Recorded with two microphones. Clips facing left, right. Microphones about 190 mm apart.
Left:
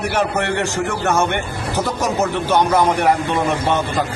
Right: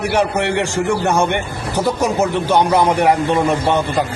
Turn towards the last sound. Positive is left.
turn(degrees=-15)  # may be behind; listen again after turning